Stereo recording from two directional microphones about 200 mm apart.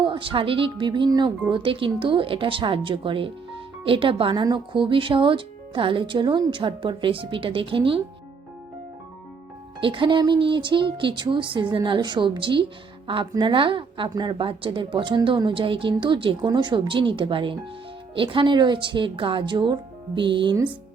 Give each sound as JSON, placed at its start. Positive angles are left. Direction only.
{"t": 0.0, "sound": "a woman's voice", "side_deg": -25}
{"t": 9.8, "sound": "a woman's voice", "side_deg": -25}